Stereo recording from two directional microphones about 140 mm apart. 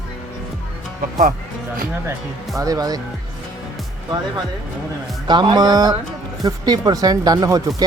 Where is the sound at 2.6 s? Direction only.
25° right (ahead or behind).